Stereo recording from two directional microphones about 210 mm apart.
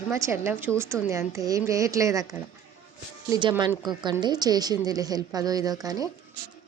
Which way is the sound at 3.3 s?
20° right (ahead or behind).